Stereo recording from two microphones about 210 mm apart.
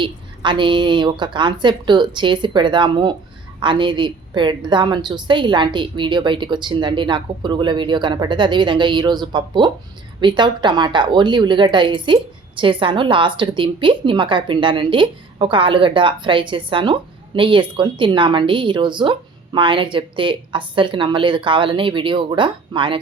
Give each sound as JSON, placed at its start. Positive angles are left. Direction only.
{"t": 0.0, "sound": "a woman's voice", "side_deg": -25}